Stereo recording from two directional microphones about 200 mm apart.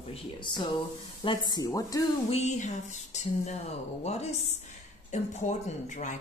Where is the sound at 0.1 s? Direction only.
25° left (ahead or behind).